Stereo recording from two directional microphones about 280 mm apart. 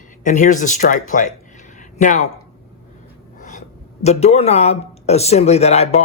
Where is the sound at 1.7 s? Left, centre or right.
Left.